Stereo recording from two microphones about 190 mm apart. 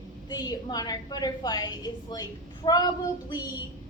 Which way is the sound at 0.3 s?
20° left (ahead or behind).